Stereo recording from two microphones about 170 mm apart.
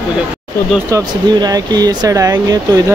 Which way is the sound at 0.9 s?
20° right (ahead or behind).